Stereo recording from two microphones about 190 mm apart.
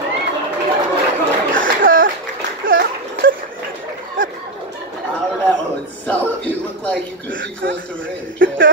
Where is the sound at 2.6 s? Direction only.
90° right.